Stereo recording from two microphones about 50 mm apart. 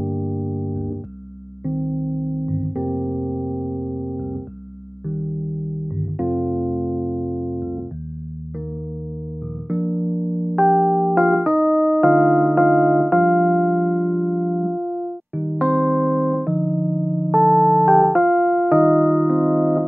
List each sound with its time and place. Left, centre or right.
0.0 s music: centre
5.9 s music: centre
9.7 s music: centre
11.5 s electric piano: centre
15.7 s keyboard: right
17.4 s electric piano: centre